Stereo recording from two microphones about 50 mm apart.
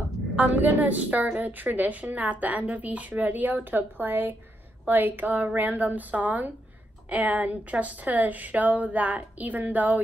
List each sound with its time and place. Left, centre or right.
0.4 s a woman's voice: right